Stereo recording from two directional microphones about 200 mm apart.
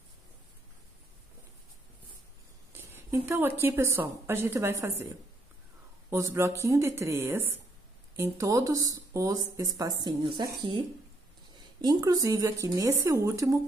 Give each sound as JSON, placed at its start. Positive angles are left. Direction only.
{"t": 2.7, "sound": "a woman's voice", "side_deg": -10}
{"t": 6.0, "sound": "speech", "side_deg": -15}